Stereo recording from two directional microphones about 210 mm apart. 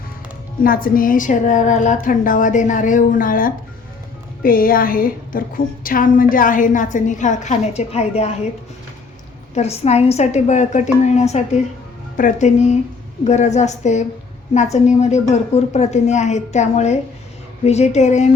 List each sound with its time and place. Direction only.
0.6 s a woman's voice: 45° left (ahead or behind)
9.6 s a woman's voice: 30° left (ahead or behind)